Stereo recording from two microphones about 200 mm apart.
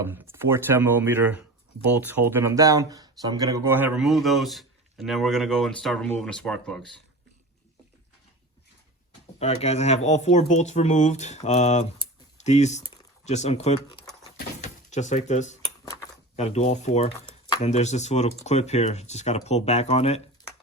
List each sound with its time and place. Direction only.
0.0 s speech: 10° right (ahead or behind)
9.4 s speech: 30° left (ahead or behind)
17.2 s a sound: 20° left (ahead or behind)
17.6 s speech: 35° left (ahead or behind)